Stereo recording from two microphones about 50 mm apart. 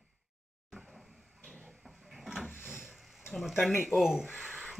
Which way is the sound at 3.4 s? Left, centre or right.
Centre.